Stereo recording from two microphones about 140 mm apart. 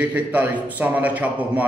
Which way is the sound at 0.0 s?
10° right (ahead or behind).